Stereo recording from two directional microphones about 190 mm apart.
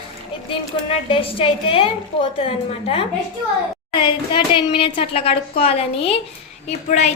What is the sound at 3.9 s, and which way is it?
A child's voice, 25° left (ahead or behind).